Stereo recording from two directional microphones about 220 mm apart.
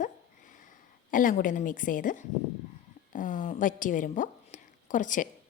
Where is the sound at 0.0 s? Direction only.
35° left (ahead or behind).